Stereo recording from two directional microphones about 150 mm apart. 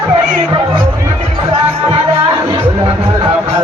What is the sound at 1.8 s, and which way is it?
Music, 35° right (ahead or behind).